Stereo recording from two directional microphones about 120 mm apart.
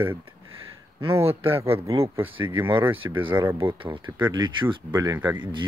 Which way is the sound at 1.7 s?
50° right (ahead or behind).